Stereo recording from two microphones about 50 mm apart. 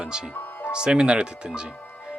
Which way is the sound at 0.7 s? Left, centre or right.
Centre.